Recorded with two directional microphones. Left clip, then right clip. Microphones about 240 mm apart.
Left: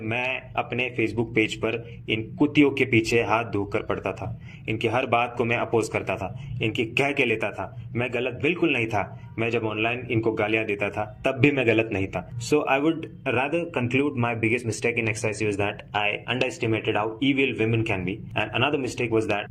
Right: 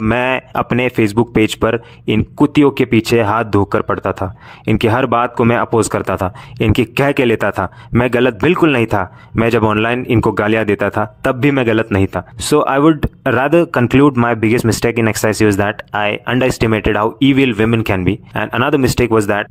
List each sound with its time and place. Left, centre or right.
0.0 s a man's voice: right